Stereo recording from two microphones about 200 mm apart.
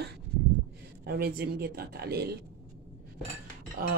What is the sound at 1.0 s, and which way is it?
Speech, 50° right (ahead or behind).